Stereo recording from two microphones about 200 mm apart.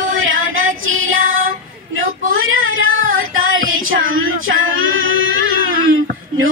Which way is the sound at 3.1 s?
85° right.